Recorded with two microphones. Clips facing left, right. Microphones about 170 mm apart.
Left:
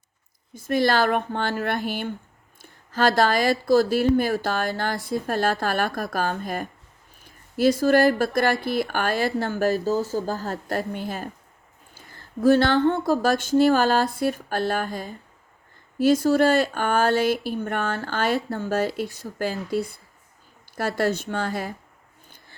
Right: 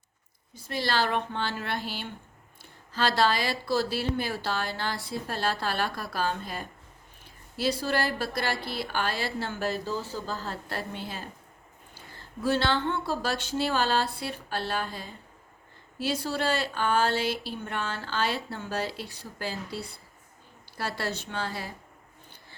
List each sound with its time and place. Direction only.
0.5 s speech: 50° left (ahead or behind)
12.4 s speech: 45° left (ahead or behind)